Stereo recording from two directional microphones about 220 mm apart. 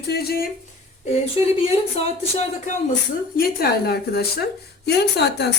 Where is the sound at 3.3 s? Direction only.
45° left (ahead or behind).